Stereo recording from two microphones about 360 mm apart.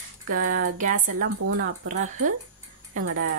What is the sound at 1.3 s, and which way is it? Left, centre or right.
Speech, right.